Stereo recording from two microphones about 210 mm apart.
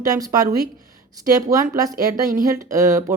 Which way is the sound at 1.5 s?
15° right (ahead or behind).